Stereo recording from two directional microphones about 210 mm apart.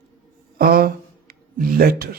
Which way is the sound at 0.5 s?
45° right (ahead or behind).